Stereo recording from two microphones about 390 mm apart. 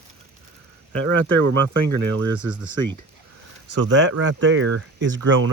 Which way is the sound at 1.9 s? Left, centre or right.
Right.